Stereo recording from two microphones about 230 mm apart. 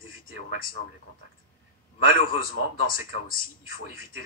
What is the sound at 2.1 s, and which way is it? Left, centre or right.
Speech, left.